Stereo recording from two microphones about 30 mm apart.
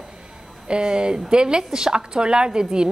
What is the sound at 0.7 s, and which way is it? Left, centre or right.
A woman's voice, right.